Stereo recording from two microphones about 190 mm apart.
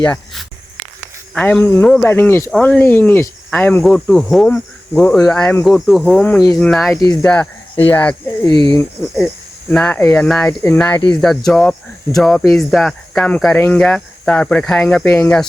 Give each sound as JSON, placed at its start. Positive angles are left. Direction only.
{"t": 0.0, "sound": "speech", "side_deg": 10}
{"t": 10.8, "sound": "speech", "side_deg": 20}
{"t": 11.2, "sound": "speech", "side_deg": 0}